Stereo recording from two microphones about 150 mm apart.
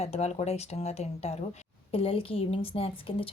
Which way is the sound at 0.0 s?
45° left (ahead or behind).